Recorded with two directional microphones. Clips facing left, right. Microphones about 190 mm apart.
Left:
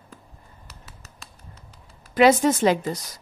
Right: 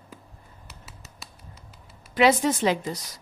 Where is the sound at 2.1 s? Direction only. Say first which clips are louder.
Left 4 dB; 45° left (ahead or behind).